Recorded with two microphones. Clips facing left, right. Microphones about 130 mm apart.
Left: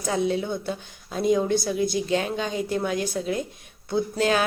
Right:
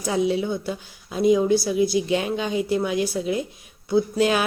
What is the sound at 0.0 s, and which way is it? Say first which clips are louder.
Mantra: right 2 dB; 10° right (ahead or behind).